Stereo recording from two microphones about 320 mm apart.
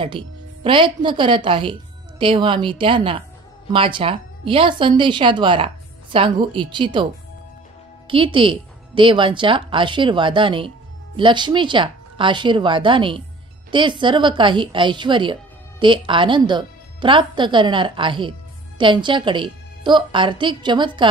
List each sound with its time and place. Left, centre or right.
0.7 s speech: centre
8.1 s speech: centre